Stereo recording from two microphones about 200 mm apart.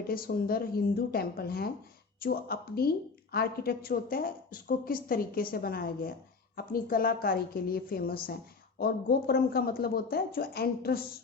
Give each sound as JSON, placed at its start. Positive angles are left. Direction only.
{"t": 0.1, "sound": "a woman's voice", "side_deg": 50}